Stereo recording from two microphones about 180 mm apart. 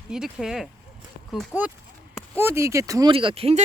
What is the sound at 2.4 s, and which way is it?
Speech, 15° right (ahead or behind).